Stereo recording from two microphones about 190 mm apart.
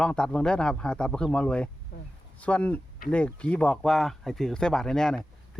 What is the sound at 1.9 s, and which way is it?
Speech, 60° left (ahead or behind).